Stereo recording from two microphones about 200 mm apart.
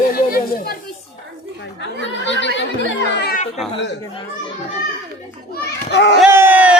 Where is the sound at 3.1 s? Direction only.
55° left (ahead or behind).